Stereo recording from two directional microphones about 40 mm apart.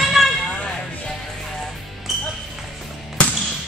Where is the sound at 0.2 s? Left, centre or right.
Centre.